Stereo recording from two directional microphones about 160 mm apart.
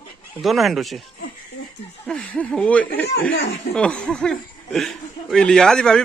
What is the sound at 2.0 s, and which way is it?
Speech, 5° left (ahead or behind).